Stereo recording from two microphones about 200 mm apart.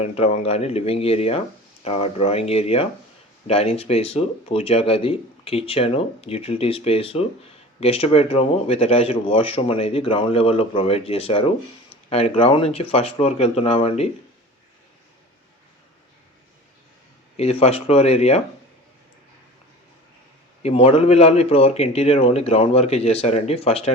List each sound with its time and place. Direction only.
0.0 s a man's voice: 30° left (ahead or behind)
17.3 s a man's voice: 30° left (ahead or behind)
20.6 s a man's voice: 30° left (ahead or behind)